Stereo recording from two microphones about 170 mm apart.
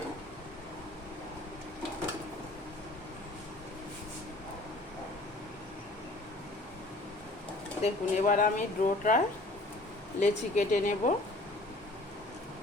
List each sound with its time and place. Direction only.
7.8 s speech: 45° left (ahead or behind)